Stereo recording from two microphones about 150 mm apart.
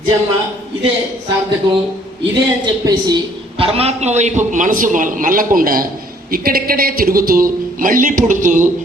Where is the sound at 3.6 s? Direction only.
40° right (ahead or behind).